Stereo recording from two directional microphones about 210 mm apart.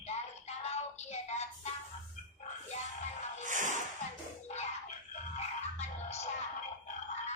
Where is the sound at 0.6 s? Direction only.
30° left (ahead or behind).